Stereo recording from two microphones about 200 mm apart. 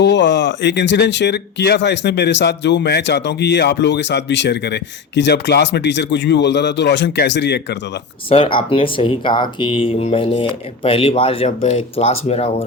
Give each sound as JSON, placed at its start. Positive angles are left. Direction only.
{"t": 0.0, "sound": "speech", "side_deg": 60}
{"t": 8.3, "sound": "speech", "side_deg": 25}